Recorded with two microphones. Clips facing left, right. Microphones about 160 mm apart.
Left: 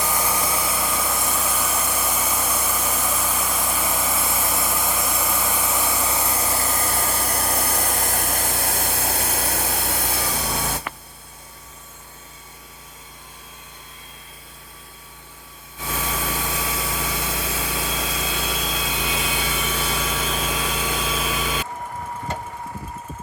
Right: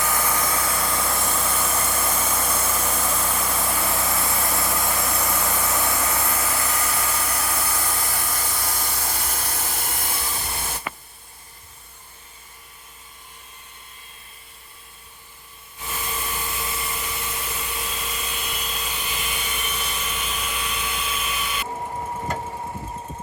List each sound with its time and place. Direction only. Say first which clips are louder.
0.0 s vehicle: even; 15° left (ahead or behind); by 10.8 s 75° left (ahead or behind)
15.8 s light engine: left 4 dB; 90° left